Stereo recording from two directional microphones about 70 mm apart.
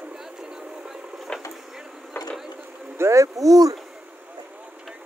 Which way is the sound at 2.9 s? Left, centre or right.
Right.